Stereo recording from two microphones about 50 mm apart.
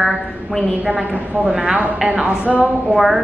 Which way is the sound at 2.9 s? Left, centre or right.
Centre.